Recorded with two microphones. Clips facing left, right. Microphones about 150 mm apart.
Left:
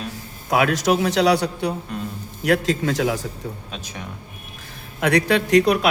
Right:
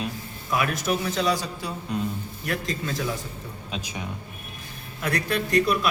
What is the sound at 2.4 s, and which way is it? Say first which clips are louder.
Speech: left 11 dB; 80° left.